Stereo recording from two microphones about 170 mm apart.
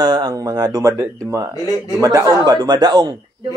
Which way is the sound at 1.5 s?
20° left (ahead or behind).